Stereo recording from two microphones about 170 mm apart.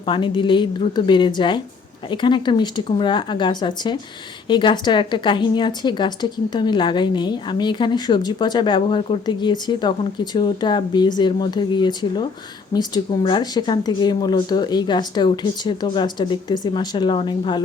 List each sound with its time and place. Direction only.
0.0 s a woman's voice: 30° left (ahead or behind)